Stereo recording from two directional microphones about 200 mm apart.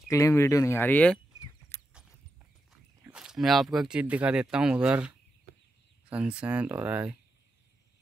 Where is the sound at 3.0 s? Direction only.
5° right (ahead or behind).